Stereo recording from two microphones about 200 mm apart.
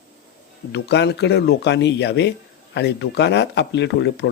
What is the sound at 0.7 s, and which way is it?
Speech, 55° left (ahead or behind).